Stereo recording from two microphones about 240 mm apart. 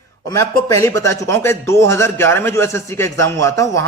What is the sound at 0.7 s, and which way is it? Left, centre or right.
A man's voice, centre.